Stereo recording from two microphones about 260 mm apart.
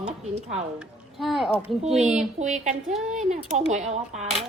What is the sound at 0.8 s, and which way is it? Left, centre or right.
Speech, centre.